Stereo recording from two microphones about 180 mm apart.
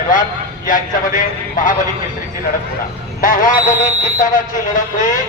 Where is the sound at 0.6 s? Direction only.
50° left (ahead or behind).